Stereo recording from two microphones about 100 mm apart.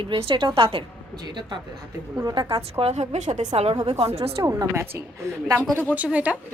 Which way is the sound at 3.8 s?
85° right.